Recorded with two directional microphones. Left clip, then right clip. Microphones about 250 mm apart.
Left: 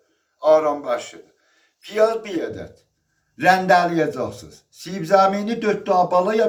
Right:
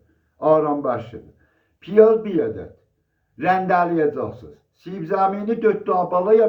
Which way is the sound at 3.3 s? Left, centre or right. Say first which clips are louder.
Left 3 dB; centre.